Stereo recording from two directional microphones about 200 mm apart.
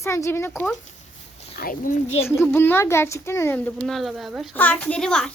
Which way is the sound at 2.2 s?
10° left (ahead or behind).